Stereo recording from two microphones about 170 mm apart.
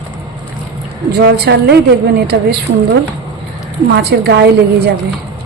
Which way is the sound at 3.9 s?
70° right (ahead or behind).